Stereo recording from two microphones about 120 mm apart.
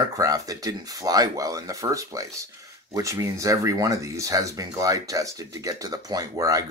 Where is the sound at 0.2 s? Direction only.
30° right (ahead or behind).